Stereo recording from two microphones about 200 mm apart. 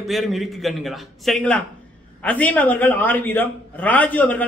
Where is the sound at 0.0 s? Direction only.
Centre (ahead or behind).